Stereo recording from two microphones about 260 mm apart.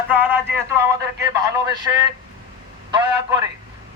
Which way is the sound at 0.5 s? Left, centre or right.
Centre.